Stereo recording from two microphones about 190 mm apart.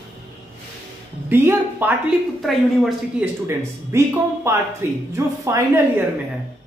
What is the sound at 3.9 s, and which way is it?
Speech, 15° right (ahead or behind).